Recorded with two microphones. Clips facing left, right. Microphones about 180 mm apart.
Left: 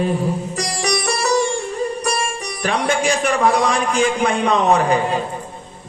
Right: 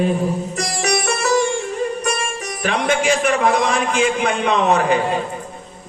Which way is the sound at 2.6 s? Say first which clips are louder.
Even; 35° left (ahead or behind).